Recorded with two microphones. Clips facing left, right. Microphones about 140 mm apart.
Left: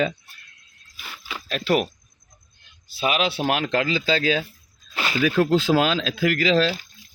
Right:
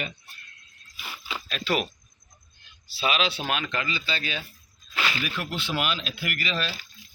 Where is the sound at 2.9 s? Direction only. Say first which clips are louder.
Left 3 dB; 50° left (ahead or behind).